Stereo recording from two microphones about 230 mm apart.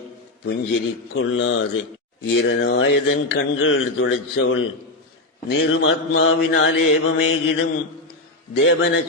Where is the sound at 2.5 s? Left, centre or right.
Left.